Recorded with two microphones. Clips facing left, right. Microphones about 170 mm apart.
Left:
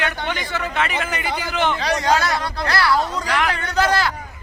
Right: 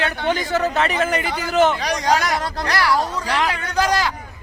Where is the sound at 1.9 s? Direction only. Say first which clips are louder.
Even; 15° right (ahead or behind).